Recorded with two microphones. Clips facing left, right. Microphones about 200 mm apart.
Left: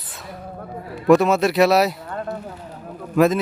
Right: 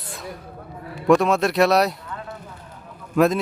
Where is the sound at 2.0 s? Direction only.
50° left (ahead or behind).